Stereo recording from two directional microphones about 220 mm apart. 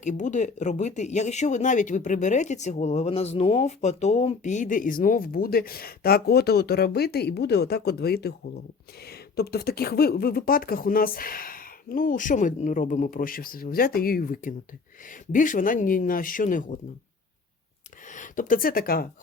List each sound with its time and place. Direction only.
0.0 s speech: 35° left (ahead or behind)
18.1 s speech: 35° left (ahead or behind)